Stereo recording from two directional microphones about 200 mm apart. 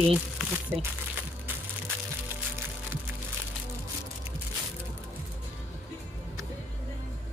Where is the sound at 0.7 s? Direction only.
10° right (ahead or behind).